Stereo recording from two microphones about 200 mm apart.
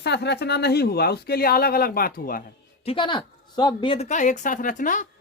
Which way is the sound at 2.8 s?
25° left (ahead or behind).